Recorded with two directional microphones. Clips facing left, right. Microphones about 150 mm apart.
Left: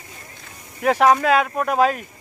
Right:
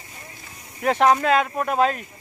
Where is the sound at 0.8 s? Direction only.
Centre (ahead or behind).